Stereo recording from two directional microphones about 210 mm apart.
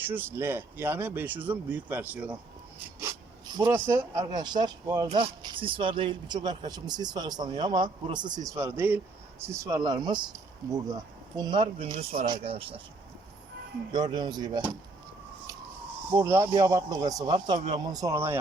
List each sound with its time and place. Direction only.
0.1 s speech: 10° right (ahead or behind); by 12.8 s 25° right (ahead or behind)
13.9 s speech: 20° right (ahead or behind)
16.0 s speech: 10° right (ahead or behind)